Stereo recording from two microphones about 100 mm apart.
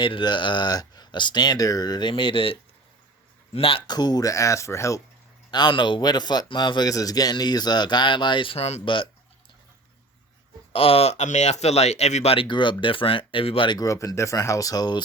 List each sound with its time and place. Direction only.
0.0 s a man's voice: 50° left (ahead or behind)
3.8 s speech: 45° left (ahead or behind)
5.5 s a man's voice: 50° left (ahead or behind)
8.5 s speech: 90° left
8.8 s speech: 55° left (ahead or behind)
10.7 s speech: 70° left (ahead or behind)
12.5 s a man's voice: 55° left (ahead or behind)
13.7 s speech: 35° left (ahead or behind)